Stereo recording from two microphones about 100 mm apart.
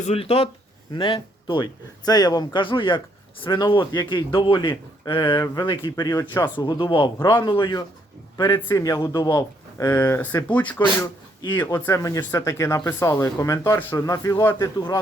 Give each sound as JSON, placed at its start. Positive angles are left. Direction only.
{"t": 0.1, "sound": "speech", "side_deg": 85}
{"t": 0.9, "sound": "speech", "side_deg": 55}
{"t": 6.0, "sound": "speech", "side_deg": 35}
{"t": 6.6, "sound": "speech", "side_deg": 45}
{"t": 8.4, "sound": "speech", "side_deg": 25}
{"t": 9.7, "sound": "speech", "side_deg": 20}
{"t": 11.9, "sound": "speech", "side_deg": 35}